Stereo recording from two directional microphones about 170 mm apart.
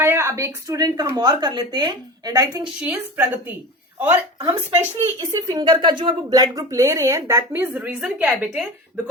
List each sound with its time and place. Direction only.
0.0 s speech: 15° right (ahead or behind)
2.8 s a woman's voice: 10° right (ahead or behind)
4.4 s speech: 35° right (ahead or behind)
5.3 s speech: 25° right (ahead or behind); by 8.6 s 5° right (ahead or behind)